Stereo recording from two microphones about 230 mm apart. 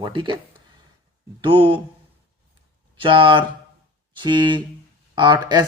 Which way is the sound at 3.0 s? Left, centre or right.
Right.